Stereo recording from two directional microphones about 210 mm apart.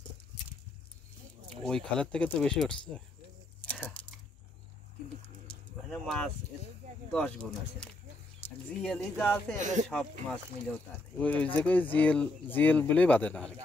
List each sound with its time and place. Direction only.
1.6 s speech: 5° left (ahead or behind)
3.6 s a sound: 5° left (ahead or behind)
5.9 s speech: centre (ahead or behind)
8.4 s a sound: 30° left (ahead or behind)
8.8 s speech: 5° left (ahead or behind)
9.6 s speech: 35° right (ahead or behind)
9.8 s speech: 5° left (ahead or behind)